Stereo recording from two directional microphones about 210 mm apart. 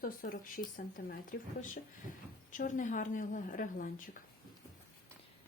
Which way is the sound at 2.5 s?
40° left (ahead or behind).